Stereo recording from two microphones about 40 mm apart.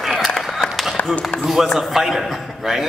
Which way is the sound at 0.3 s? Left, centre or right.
Centre.